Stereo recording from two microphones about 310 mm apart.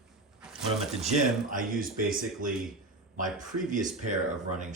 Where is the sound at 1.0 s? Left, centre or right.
Right.